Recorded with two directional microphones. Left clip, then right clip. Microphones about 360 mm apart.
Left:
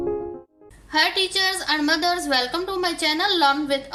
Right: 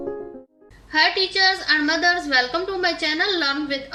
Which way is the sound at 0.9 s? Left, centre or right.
Centre.